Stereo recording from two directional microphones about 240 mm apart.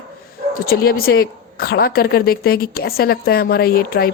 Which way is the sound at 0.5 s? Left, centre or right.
Left.